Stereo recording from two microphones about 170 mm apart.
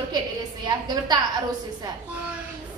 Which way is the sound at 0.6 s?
25° right (ahead or behind).